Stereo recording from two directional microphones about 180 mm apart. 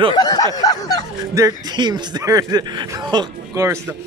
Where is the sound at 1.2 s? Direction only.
20° right (ahead or behind).